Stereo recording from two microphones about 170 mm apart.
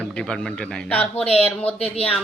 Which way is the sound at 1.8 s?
35° left (ahead or behind).